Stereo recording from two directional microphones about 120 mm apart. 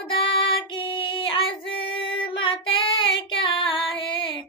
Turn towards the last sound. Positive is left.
turn(degrees=45)  # may be behind; listen again after turning